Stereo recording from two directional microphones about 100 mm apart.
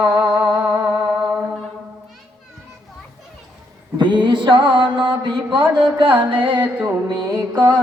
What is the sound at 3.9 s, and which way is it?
Music, 50° right (ahead or behind).